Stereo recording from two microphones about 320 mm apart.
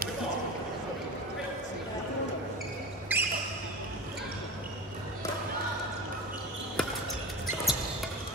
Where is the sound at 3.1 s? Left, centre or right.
Centre.